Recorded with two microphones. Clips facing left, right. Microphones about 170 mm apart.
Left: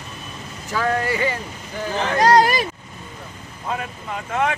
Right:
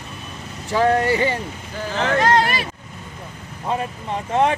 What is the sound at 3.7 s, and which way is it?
Speech, 30° right (ahead or behind).